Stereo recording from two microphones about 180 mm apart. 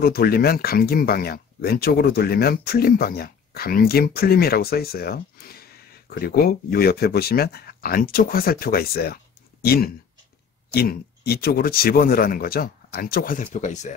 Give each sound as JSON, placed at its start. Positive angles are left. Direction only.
{"t": 0.0, "sound": "speech", "side_deg": 60}